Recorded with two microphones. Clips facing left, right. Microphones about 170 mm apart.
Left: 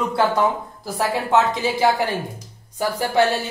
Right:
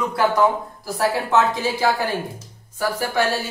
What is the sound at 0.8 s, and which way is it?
A woman's voice, 20° left (ahead or behind).